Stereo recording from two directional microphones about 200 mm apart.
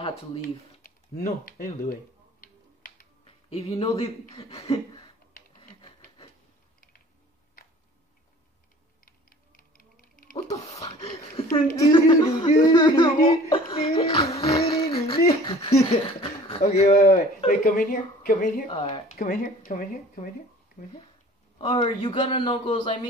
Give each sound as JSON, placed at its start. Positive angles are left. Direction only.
{"t": 0.8, "sound": "speech", "side_deg": 45}
{"t": 3.3, "sound": "a sound", "side_deg": 30}
{"t": 4.0, "sound": "a man's voice", "side_deg": 30}
{"t": 5.6, "sound": "printer", "side_deg": 25}
{"t": 9.0, "sound": "music", "side_deg": 45}
{"t": 10.3, "sound": "sneeze", "side_deg": 15}
{"t": 11.0, "sound": "speech", "side_deg": 30}
{"t": 17.6, "sound": "speech", "side_deg": 45}
{"t": 18.7, "sound": "a man's voice", "side_deg": 30}
{"t": 19.1, "sound": "speech", "side_deg": 45}
{"t": 21.5, "sound": "a man's voice", "side_deg": 20}